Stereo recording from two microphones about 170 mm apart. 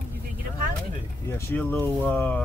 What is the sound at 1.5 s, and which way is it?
Speech, 10° left (ahead or behind).